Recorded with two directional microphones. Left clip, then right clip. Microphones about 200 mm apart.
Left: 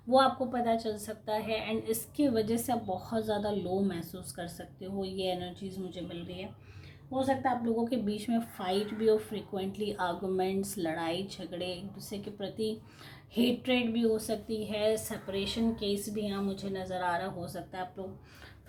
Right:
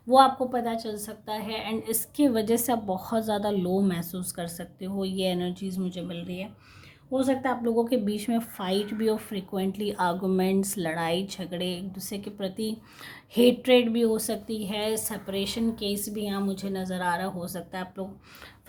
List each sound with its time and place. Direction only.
0.1 s a woman's voice: 40° right (ahead or behind)
0.6 s a woman's voice: 25° right (ahead or behind)